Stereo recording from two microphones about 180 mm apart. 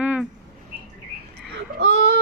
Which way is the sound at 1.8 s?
75° right (ahead or behind).